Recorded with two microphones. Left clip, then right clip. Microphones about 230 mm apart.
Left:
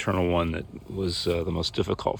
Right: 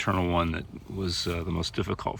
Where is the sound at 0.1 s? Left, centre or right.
Centre.